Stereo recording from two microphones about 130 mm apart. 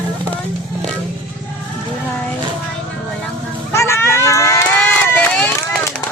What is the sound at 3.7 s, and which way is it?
Run, 20° left (ahead or behind).